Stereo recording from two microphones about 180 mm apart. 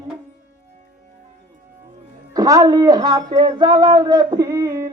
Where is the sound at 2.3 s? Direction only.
20° right (ahead or behind).